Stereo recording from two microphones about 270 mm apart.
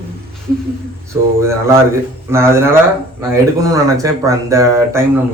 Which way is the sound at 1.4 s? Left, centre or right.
Centre.